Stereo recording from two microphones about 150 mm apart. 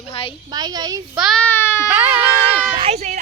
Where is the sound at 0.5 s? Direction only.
25° right (ahead or behind).